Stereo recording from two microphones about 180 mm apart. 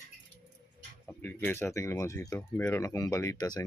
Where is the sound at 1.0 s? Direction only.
10° left (ahead or behind).